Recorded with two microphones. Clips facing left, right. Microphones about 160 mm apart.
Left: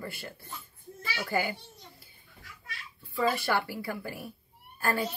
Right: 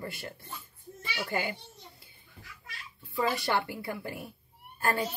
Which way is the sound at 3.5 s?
25° right (ahead or behind).